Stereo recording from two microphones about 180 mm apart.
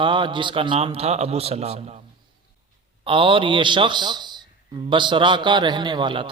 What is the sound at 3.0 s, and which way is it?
Mantra, 30° right (ahead or behind).